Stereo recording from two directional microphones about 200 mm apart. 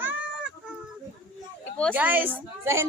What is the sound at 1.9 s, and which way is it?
Speech, 10° right (ahead or behind).